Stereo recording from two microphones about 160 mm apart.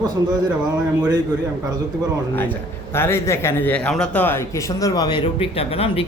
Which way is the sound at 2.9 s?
15° left (ahead or behind).